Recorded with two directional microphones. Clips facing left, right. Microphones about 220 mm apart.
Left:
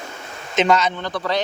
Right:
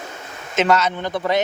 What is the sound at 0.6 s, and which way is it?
Speech, 5° right (ahead or behind).